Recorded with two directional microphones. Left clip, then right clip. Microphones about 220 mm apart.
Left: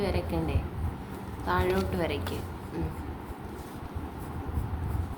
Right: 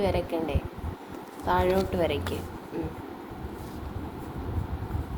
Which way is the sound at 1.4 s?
10° left (ahead or behind).